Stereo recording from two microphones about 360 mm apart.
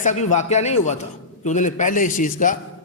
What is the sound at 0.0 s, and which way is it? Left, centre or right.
A man's voice, centre.